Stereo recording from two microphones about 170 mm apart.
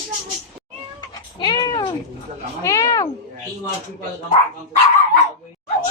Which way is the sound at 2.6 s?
20° left (ahead or behind).